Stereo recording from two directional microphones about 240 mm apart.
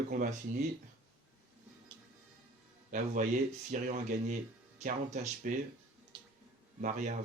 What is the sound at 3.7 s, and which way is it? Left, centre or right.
Speech, right.